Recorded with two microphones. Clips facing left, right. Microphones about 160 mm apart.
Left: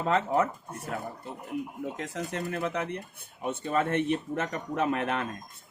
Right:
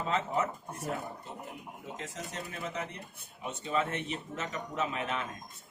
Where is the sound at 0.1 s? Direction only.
60° left (ahead or behind).